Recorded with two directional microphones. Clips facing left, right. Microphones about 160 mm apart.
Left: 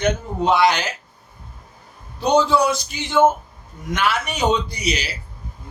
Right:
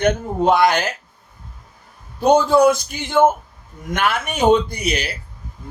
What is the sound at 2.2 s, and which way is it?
Speech, 50° right (ahead or behind).